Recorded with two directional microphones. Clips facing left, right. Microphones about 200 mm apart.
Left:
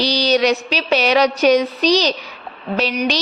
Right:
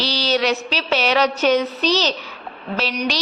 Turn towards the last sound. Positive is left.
turn(degrees=15)  # may be behind; listen again after turning